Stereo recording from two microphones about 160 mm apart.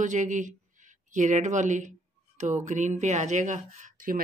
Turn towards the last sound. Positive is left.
turn(degrees=-55)  # may be behind; listen again after turning